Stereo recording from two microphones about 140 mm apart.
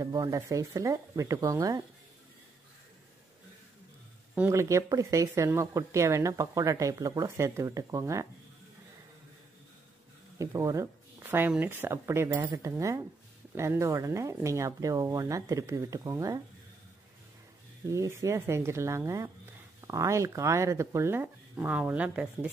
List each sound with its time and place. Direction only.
0.0 s speech: 25° right (ahead or behind)
4.4 s speech: 20° right (ahead or behind)
10.4 s speech: 25° right (ahead or behind)
17.8 s speech: 20° right (ahead or behind)